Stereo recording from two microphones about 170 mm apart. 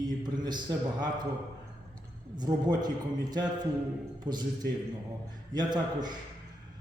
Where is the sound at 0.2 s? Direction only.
25° right (ahead or behind).